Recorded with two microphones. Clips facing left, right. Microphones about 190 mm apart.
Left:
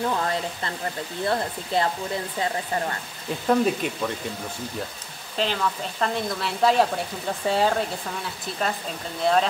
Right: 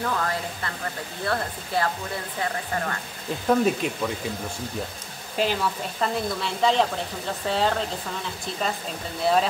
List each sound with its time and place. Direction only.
0.0 s speech: 25° left (ahead or behind)
3.4 s speech: centre (ahead or behind)
5.4 s speech: 10° right (ahead or behind); by 7.8 s 10° left (ahead or behind)
9.3 s speech: 5° right (ahead or behind)